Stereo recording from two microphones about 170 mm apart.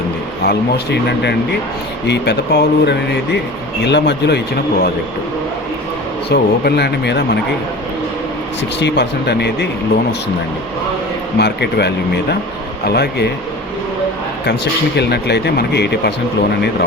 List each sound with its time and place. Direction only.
0.4 s speech: 80° left
6.3 s speech: 75° left (ahead or behind)
8.8 s speech: 80° left
11.3 s speech: 80° left
14.4 s speech: 80° left